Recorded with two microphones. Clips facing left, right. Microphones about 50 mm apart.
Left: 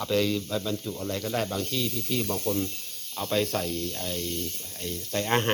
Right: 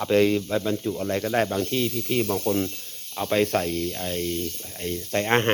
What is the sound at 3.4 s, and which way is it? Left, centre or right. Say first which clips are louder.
Speech: right 5 dB; right.